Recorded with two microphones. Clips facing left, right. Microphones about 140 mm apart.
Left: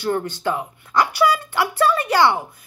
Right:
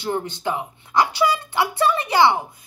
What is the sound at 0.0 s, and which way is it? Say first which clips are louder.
A child's voice: left 3 dB; 20° right (ahead or behind).